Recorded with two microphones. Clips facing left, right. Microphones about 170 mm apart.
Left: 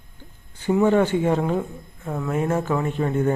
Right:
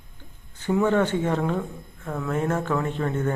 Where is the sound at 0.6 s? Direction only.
10° left (ahead or behind).